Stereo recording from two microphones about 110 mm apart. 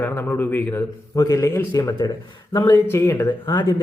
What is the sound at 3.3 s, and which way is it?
Speech, 40° left (ahead or behind).